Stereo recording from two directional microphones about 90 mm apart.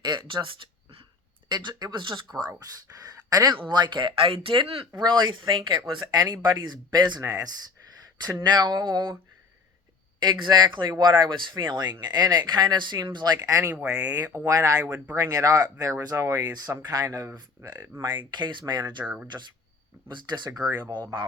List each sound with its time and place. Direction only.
0.0 s a sound: 60° right (ahead or behind); by 1.0 s 80° right
1.5 s speech: 55° right (ahead or behind)
2.4 s speech: 45° right (ahead or behind); by 4.9 s 90° right
4.9 s speech: 55° right (ahead or behind)
5.9 s speech: 50° right (ahead or behind)
10.2 s speech: 55° right (ahead or behind)
17.6 s speech: 30° right (ahead or behind)
18.3 s speech: 55° right (ahead or behind)
19.0 s speech: 10° right (ahead or behind)
19.3 s speech: 55° right (ahead or behind)